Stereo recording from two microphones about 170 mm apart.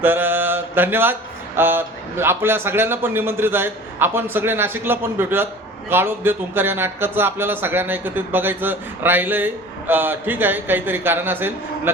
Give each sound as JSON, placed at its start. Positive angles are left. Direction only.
{"t": 0.0, "sound": "mantra", "side_deg": -10}
{"t": 1.5, "sound": "a man's voice", "side_deg": -15}